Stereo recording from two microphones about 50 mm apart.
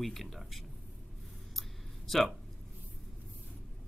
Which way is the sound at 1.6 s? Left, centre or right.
Centre.